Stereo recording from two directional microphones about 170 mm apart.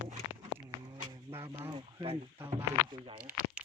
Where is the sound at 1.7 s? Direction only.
25° right (ahead or behind).